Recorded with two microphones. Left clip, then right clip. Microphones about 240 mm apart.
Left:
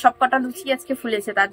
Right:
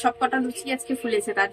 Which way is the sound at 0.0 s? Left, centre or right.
Centre.